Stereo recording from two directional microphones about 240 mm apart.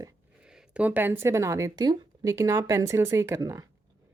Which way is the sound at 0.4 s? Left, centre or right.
Centre.